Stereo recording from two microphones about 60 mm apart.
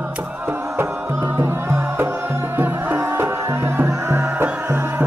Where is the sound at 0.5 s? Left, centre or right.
Right.